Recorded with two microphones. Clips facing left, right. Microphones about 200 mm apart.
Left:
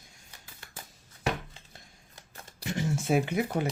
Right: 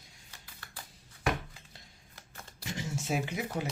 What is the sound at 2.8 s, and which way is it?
Speech, 55° left (ahead or behind).